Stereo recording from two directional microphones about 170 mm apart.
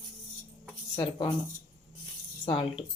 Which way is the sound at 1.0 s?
30° left (ahead or behind).